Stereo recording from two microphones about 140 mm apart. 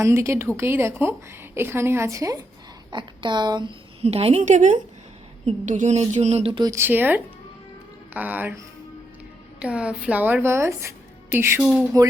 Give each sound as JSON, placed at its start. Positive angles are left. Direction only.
{"t": 0.0, "sound": "speech", "side_deg": -20}
{"t": 2.9, "sound": "a woman's voice", "side_deg": -35}
{"t": 4.0, "sound": "speech", "side_deg": -45}
{"t": 6.5, "sound": "a woman's voice", "side_deg": -35}
{"t": 6.7, "sound": "speech", "side_deg": -15}
{"t": 11.6, "sound": "speech", "side_deg": -5}